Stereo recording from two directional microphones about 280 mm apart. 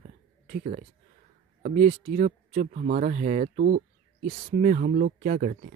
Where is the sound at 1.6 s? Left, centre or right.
Right.